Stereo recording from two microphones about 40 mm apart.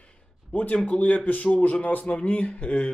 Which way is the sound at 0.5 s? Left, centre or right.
Left.